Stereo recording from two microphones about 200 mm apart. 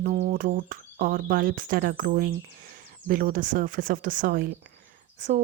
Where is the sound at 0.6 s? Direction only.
45° right (ahead or behind).